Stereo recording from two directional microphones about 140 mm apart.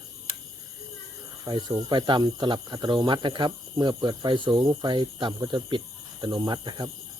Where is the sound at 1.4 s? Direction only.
30° right (ahead or behind).